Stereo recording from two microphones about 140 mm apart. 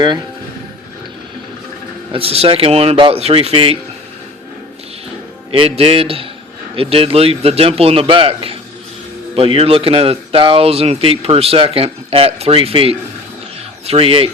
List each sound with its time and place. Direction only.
2.1 s speech: 45° right (ahead or behind)
5.5 s speech: 45° right (ahead or behind)